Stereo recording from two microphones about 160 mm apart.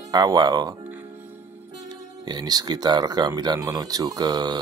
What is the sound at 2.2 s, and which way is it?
Speech, 25° right (ahead or behind).